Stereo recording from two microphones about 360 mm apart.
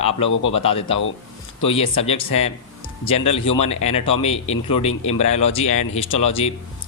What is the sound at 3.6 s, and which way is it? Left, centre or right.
A man's voice, centre.